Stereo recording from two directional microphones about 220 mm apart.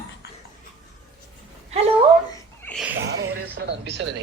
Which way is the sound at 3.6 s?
50° right (ahead or behind).